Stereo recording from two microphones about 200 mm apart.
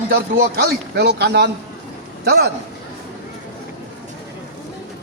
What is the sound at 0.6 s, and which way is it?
Speech, 55° right (ahead or behind).